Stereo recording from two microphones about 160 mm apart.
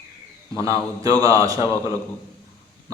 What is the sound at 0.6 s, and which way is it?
A man's voice, 20° right (ahead or behind).